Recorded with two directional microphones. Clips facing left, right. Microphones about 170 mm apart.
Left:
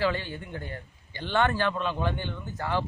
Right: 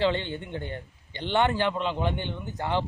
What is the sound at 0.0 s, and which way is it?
A man's voice, 25° right (ahead or behind).